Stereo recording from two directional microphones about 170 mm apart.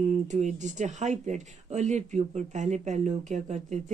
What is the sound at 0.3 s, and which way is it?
Speech, 45° right (ahead or behind).